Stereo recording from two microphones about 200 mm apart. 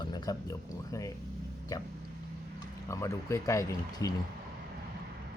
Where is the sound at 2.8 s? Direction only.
15° left (ahead or behind).